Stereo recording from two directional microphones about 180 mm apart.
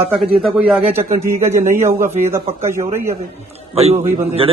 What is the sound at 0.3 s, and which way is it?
Speech, centre (ahead or behind).